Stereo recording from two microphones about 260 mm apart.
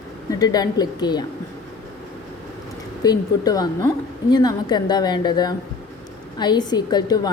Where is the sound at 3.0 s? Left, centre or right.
Centre.